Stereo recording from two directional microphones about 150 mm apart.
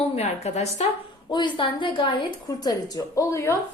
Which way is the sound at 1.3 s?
30° left (ahead or behind).